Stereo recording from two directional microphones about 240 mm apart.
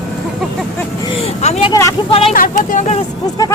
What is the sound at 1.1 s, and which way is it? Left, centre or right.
Speech, left.